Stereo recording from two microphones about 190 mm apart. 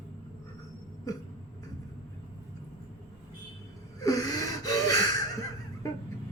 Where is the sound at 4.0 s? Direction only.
20° left (ahead or behind).